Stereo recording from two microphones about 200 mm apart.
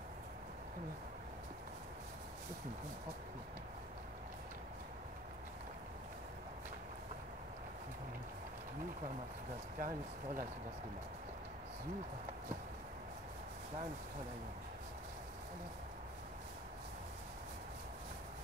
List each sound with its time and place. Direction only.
9.8 s speech: 40° right (ahead or behind)